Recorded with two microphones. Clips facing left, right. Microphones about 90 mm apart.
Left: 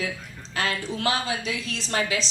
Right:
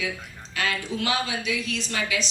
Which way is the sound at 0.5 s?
35° left (ahead or behind).